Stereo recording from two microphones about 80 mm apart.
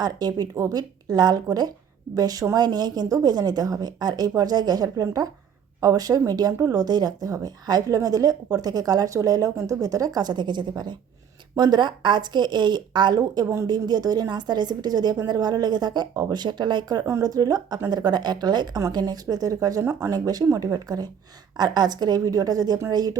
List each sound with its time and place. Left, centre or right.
0.0 s a woman's voice: right
0.5 s a woman's voice: right
13.4 s speech: right
13.7 s a woman's voice: right
17.1 s speech: right
17.8 s a woman's voice: right